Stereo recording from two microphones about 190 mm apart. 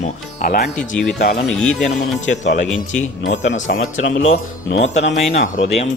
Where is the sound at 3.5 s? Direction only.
80° left.